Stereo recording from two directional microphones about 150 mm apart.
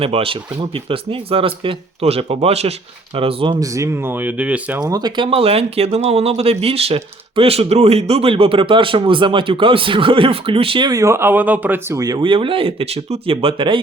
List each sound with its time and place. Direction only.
0.0 s speech: 40° right (ahead or behind)
3.6 s speech: 20° right (ahead or behind)
4.8 s speech: 25° right (ahead or behind)